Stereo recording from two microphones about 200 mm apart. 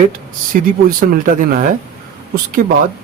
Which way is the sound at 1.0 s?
45° right (ahead or behind).